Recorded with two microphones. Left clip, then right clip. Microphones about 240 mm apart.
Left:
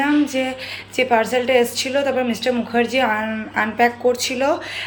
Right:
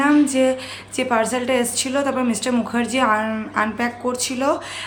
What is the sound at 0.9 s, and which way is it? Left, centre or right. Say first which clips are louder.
A woman's voice: left 3 dB; centre.